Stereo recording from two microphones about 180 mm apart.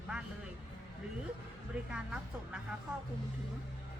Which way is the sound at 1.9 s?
5° right (ahead or behind).